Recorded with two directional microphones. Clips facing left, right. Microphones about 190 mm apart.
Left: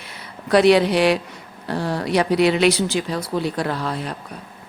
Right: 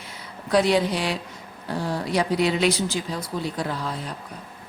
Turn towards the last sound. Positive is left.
turn(degrees=70)  # may be behind; listen again after turning